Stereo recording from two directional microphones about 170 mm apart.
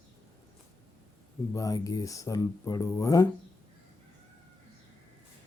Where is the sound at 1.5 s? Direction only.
20° left (ahead or behind).